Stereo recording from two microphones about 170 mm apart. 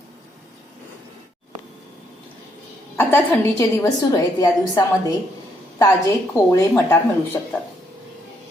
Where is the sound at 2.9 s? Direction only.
10° left (ahead or behind).